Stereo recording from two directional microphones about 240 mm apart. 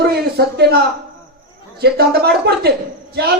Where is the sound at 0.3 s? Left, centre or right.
Right.